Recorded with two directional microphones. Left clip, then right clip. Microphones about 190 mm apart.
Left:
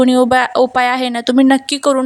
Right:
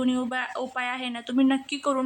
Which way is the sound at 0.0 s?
50° left (ahead or behind).